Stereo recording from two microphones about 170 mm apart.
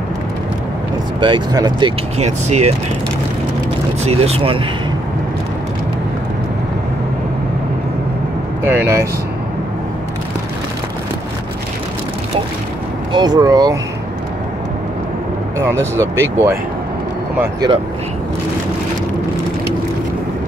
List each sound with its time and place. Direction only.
1.2 s speech: 25° right (ahead or behind)
2.1 s speech: 40° right (ahead or behind)
4.0 s speech: 35° right (ahead or behind)
8.6 s speech: 15° right (ahead or behind)
13.1 s speech: 25° right (ahead or behind)
15.6 s speech: 15° right (ahead or behind)